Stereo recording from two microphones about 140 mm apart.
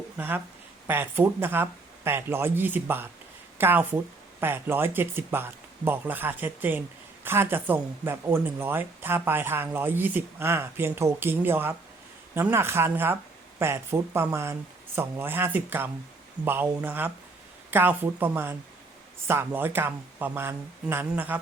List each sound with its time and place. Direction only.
0.2 s speech: 15° right (ahead or behind)